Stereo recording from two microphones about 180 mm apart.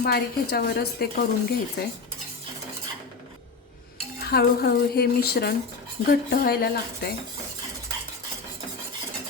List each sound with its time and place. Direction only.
0.0 s a woman's voice: 60° left (ahead or behind)
4.2 s a woman's voice: 60° left (ahead or behind)